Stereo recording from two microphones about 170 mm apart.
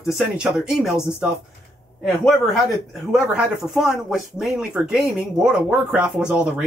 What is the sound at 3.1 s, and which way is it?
Speech, centre (ahead or behind).